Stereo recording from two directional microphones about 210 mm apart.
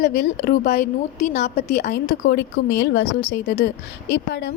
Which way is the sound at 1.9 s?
45° left (ahead or behind).